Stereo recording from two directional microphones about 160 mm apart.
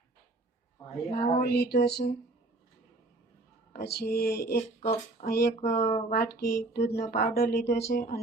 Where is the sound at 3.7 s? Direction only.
80° left.